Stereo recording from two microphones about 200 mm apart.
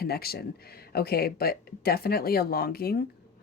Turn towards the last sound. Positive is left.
turn(degrees=50)  # may be behind; listen again after turning